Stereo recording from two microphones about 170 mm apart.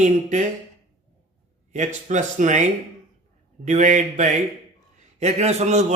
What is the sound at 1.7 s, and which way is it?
A man's voice, 45° right (ahead or behind).